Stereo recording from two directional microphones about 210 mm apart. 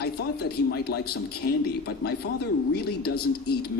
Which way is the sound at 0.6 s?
50° left (ahead or behind).